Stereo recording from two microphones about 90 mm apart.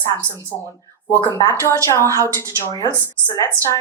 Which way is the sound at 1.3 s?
30° left (ahead or behind).